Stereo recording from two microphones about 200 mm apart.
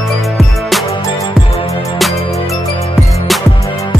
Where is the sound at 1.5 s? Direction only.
30° left (ahead or behind).